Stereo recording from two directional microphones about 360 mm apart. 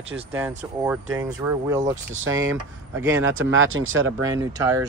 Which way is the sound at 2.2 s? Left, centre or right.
Right.